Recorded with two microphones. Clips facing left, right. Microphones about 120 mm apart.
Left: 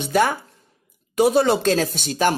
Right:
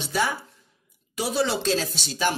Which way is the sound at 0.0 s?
55° left (ahead or behind).